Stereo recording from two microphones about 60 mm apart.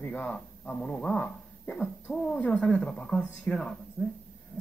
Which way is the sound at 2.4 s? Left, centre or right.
Left.